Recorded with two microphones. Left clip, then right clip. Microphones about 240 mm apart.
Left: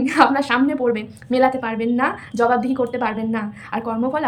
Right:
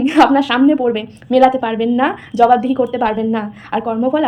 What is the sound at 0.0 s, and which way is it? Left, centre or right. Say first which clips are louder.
A woman's voice: right 4 dB; centre.